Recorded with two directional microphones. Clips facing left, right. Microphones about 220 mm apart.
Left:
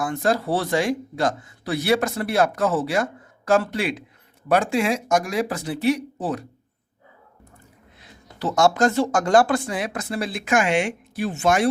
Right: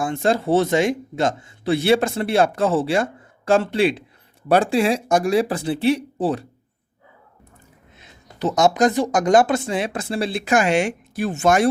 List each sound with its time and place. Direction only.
0.0 s speech: 25° right (ahead or behind)
7.9 s speech: 20° right (ahead or behind); by 11.7 s 45° right (ahead or behind)